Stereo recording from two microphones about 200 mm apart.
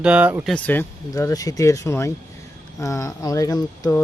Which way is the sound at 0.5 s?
5° left (ahead or behind).